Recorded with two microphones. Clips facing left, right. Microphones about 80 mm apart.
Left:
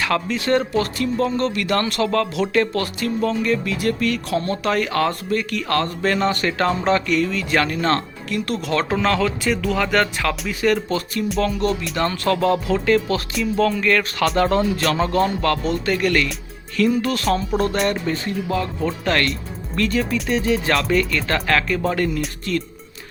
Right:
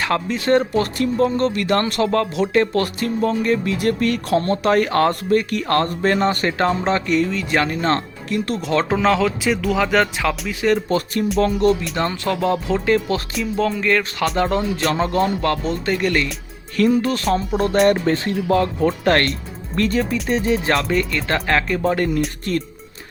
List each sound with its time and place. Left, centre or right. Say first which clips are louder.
0.0 s speech: right 1 dB; right
8.9 s speech: right 3 dB; centre
10.8 s speech: right 3 dB; right
11.9 s speech: left 1 dB; centre
12.7 s speech: even; right
14.3 s speech: left 2 dB; centre
15.0 s speech: even; right
18.0 s speech: right 4 dB; right
22.5 s speech: left 1 dB; right